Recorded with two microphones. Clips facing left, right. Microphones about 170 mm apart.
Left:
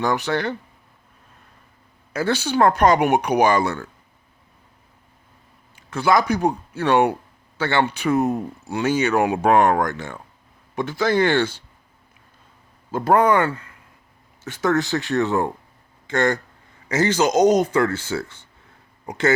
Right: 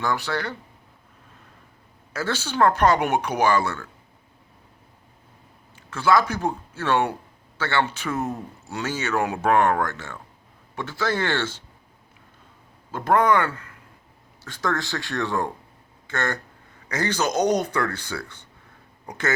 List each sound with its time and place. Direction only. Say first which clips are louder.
0.0 s speech: left 4 dB; 20° left (ahead or behind)
2.1 s speech: left 4 dB; 15° left (ahead or behind)
5.7 s speech: left 1 dB; 15° left (ahead or behind)
13.1 s speech: left 3 dB; 20° left (ahead or behind)
16.9 s speech: left 6 dB; 10° left (ahead or behind)
17.8 s speech: left 6 dB; 25° left (ahead or behind)